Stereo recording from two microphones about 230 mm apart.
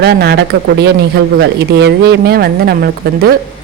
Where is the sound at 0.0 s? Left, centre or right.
Right.